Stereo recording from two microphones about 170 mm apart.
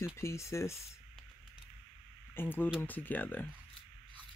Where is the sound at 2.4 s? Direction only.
10° left (ahead or behind).